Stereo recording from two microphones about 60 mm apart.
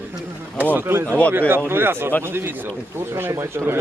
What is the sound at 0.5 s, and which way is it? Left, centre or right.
Speech, right.